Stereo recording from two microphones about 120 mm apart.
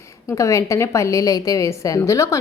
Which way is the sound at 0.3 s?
25° left (ahead or behind).